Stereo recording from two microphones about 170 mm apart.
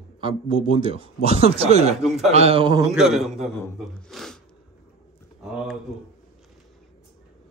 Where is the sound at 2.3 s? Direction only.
35° right (ahead or behind).